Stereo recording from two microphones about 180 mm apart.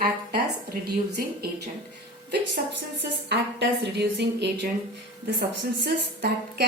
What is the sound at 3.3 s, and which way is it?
A woman's voice, 70° right (ahead or behind).